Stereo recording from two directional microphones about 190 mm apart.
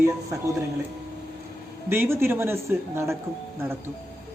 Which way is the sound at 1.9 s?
10° right (ahead or behind).